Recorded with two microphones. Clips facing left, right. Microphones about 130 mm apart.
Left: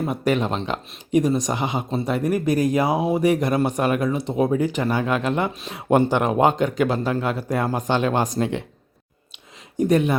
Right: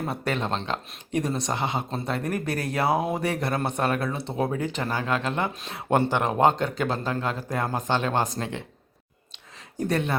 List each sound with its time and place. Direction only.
0.1 s speech: 15° left (ahead or behind)
9.7 s speech: 15° left (ahead or behind)